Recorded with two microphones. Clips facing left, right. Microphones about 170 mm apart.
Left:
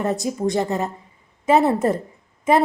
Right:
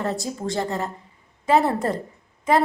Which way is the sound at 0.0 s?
20° left (ahead or behind).